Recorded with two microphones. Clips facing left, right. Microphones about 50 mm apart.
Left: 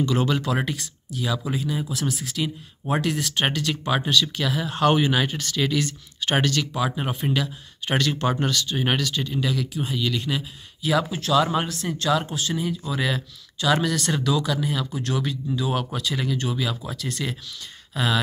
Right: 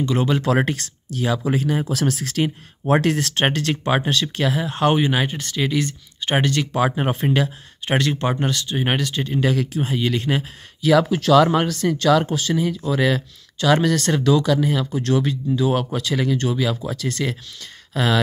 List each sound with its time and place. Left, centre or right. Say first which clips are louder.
0.0 s speech: right 2 dB; right
0.7 s speech: right 5 dB; right
1.9 s speech: right 6 dB; right
2.4 s speech: right 6 dB; right
3.4 s speech: right 5 dB; right
7.2 s speech: right 5 dB; right
9.8 s speech: right 4 dB; right
10.8 s speech: right 7 dB; right
12.9 s speech: right 8 dB; right